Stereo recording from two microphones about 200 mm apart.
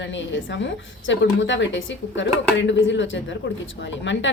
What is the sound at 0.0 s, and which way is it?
A woman's voice, 65° left (ahead or behind).